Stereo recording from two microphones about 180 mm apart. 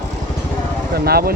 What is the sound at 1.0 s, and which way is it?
Speech, 60° right (ahead or behind).